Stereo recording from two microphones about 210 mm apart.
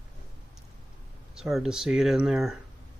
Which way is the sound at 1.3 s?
Centre (ahead or behind).